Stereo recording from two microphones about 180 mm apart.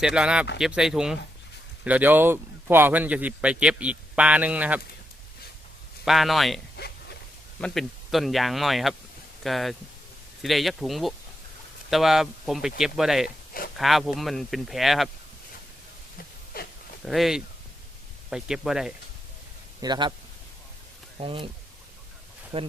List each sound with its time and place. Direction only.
0.0 s speech: 5° right (ahead or behind)
6.1 s speech: centre (ahead or behind)
6.7 s a sound: 65° left (ahead or behind)
7.6 s speech: centre (ahead or behind)
17.1 s speech: centre (ahead or behind)
19.8 s speech: 25° right (ahead or behind)
21.2 s speech: 30° right (ahead or behind)
22.5 s speech: 30° right (ahead or behind)